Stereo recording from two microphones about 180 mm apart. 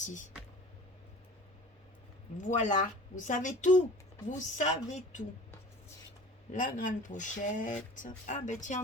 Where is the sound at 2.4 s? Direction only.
45° left (ahead or behind).